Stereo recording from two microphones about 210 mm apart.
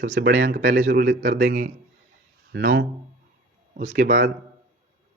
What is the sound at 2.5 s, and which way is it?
Speech, 50° right (ahead or behind).